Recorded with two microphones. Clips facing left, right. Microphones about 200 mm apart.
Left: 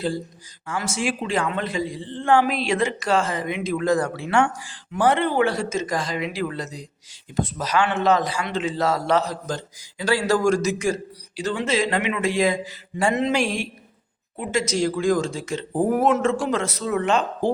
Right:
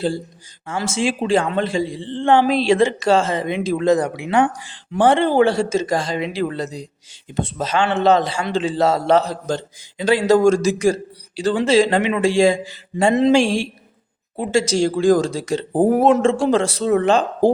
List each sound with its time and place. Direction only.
0.7 s a man's voice: 25° right (ahead or behind)